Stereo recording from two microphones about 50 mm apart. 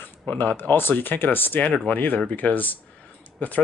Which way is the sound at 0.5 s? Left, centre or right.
Left.